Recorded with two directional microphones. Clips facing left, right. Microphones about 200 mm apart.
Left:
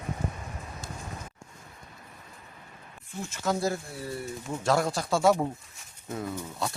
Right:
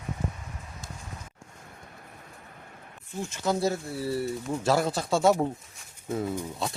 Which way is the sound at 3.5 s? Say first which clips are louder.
Right 2 dB; centre (ahead or behind).